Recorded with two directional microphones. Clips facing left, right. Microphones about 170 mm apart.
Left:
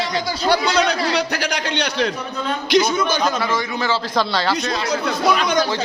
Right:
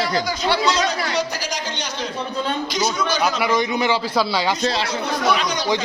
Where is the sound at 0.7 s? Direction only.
65° left (ahead or behind).